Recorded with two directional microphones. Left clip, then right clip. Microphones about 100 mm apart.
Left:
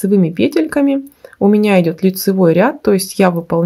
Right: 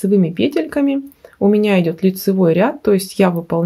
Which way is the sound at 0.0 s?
35° left (ahead or behind).